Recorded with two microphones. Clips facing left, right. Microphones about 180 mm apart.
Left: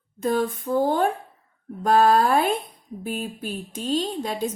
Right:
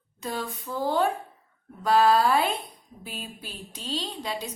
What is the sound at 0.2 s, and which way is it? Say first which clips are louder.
Speech: left 10 dB; 50° left (ahead or behind).